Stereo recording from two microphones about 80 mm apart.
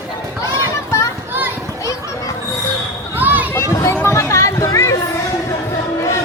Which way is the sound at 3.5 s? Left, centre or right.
Left.